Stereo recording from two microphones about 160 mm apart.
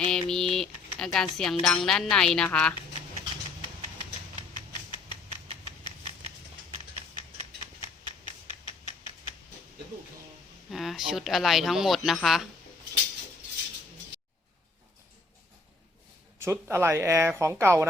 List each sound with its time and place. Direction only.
0.0 s typing: 5° left (ahead or behind)
0.5 s speech: 5° left (ahead or behind)
10.7 s speech: centre (ahead or behind)
16.4 s speech: 15° right (ahead or behind)